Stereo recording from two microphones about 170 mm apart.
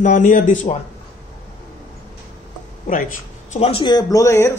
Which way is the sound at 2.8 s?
50° left (ahead or behind).